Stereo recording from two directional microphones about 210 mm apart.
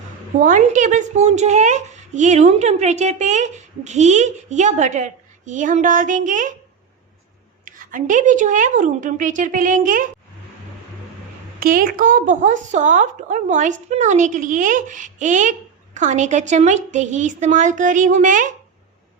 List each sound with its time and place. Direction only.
0.4 s a woman's voice: 40° right (ahead or behind)
7.6 s a woman's voice: 40° right (ahead or behind)
11.6 s a woman's voice: 40° right (ahead or behind)